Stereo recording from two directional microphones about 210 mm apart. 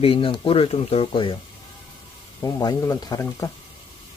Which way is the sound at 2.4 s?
15° left (ahead or behind).